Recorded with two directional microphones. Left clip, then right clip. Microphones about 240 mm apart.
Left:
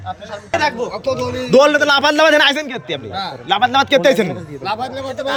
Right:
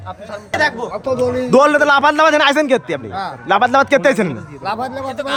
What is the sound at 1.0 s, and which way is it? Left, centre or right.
A man's voice, centre.